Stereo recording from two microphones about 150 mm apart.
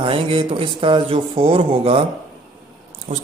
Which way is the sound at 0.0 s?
35° right (ahead or behind).